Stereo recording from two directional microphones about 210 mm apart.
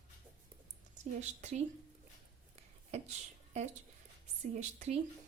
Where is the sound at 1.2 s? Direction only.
30° right (ahead or behind).